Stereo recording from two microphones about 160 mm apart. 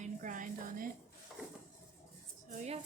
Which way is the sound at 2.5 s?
45° right (ahead or behind).